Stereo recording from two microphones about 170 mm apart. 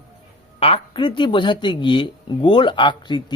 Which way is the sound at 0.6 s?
30° left (ahead or behind).